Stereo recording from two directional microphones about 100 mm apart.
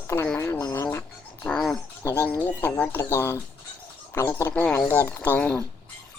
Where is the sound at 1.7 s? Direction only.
25° left (ahead or behind).